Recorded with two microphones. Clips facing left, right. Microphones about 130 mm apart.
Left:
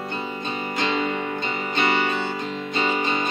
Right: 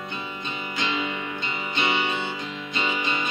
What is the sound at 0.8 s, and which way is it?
Music, 45° left (ahead or behind).